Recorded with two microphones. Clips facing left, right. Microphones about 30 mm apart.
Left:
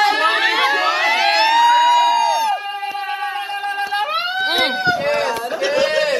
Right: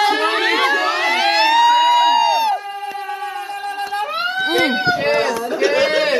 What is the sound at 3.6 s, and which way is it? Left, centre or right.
Music, left.